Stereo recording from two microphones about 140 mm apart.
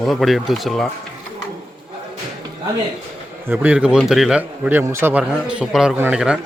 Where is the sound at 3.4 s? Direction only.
15° right (ahead or behind).